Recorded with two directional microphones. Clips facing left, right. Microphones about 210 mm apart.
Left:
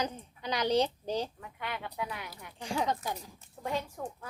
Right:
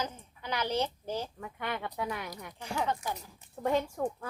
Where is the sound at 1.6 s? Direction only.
50° right (ahead or behind).